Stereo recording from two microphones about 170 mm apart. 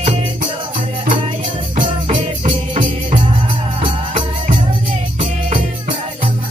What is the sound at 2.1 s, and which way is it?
Music, 30° right (ahead or behind).